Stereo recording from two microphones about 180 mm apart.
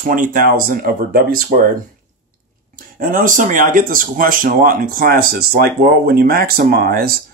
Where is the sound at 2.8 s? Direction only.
50° right (ahead or behind).